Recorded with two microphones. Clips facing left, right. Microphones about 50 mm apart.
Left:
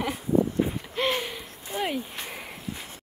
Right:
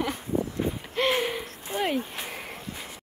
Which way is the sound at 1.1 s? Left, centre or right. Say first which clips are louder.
Right 3 dB; centre.